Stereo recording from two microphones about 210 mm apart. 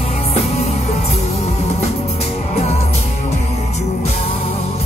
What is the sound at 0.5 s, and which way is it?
Music, 30° left (ahead or behind).